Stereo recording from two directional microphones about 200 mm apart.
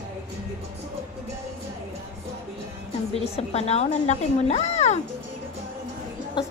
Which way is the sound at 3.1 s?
30° left (ahead or behind).